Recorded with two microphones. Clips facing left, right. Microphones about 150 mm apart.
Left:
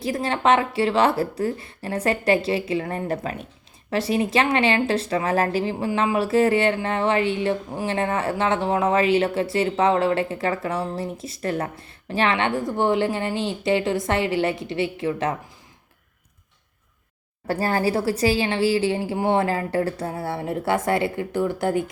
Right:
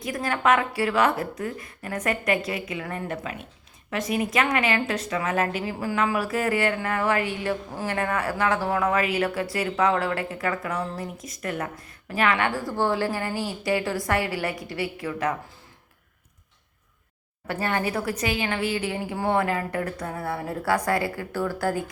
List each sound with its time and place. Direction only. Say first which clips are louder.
0.0 s speech: left 3 dB; 30° left (ahead or behind)
17.4 s speech: left 4 dB; 35° left (ahead or behind)